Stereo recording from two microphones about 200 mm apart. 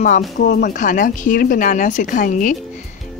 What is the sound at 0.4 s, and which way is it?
Speech, 45° left (ahead or behind).